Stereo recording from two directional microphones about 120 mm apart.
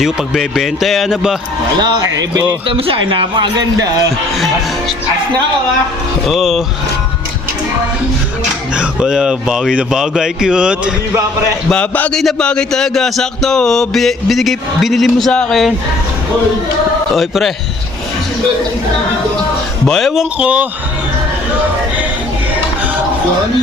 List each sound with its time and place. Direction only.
0.0 s music: 5° right (ahead or behind)
2.6 s speech: 50° right (ahead or behind); by 4.0 s 30° right (ahead or behind)
6.2 s music: centre (ahead or behind)
8.7 s music: 10° right (ahead or behind)
11.7 s a man's voice: 10° left (ahead or behind)
12.2 s music: 5° left (ahead or behind)
17.2 s music: centre (ahead or behind)
19.9 s music: centre (ahead or behind)
20.4 s speech: 10° right (ahead or behind)